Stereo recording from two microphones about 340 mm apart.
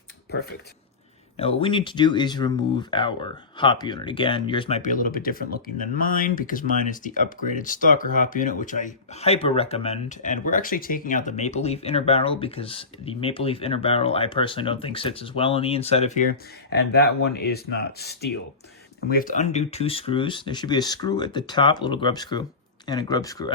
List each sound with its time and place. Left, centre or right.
0.3 s speech: left
1.4 s speech: centre